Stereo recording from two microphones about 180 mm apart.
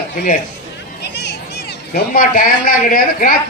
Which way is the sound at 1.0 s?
70° left (ahead or behind).